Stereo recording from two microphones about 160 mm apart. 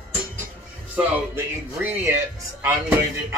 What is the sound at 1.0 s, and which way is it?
Speech, 15° right (ahead or behind).